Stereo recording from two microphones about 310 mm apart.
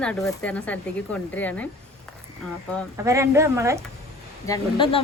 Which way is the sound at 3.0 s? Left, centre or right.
Centre.